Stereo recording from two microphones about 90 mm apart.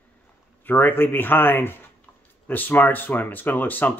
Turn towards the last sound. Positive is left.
turn(degrees=20)  # may be behind; listen again after turning